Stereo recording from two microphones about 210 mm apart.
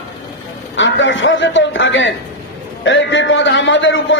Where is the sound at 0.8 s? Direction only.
60° left (ahead or behind).